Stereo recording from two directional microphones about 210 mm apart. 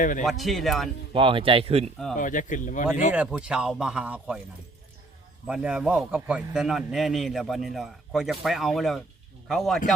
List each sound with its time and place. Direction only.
0.0 s speech: 40° left (ahead or behind)
0.3 s a man's voice: centre (ahead or behind)
1.1 s speech: 25° right (ahead or behind)
2.1 s speech: 40° left (ahead or behind)
3.1 s a man's voice: 5° right (ahead or behind)
5.5 s a man's voice: 5° right (ahead or behind)